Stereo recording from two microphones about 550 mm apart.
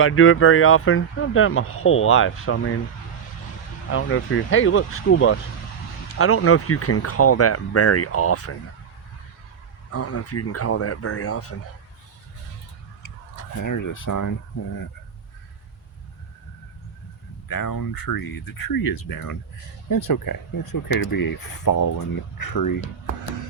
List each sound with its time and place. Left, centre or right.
0.0 s speech: left
3.8 s speech: left
9.9 s speech: left
13.6 s speech: left
17.5 s speech: left